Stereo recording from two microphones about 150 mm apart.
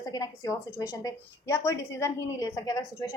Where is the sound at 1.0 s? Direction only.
20° left (ahead or behind).